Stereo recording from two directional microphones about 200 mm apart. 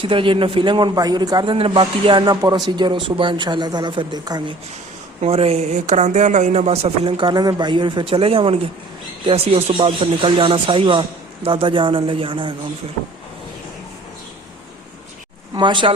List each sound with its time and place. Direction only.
0.0 s speech: 25° right (ahead or behind)
5.2 s speech: 30° right (ahead or behind)
15.5 s speech: 25° right (ahead or behind)